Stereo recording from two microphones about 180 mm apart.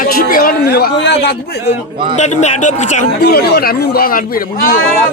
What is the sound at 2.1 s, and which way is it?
Speech, 40° left (ahead or behind).